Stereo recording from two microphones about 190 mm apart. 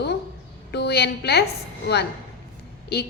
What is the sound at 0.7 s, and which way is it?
Speech, 60° left (ahead or behind).